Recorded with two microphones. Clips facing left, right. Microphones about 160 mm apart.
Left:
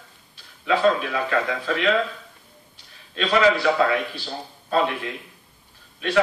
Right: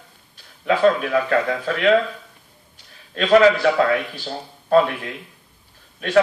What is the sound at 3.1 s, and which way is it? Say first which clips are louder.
A man's voice: right 5 dB; 50° right (ahead or behind).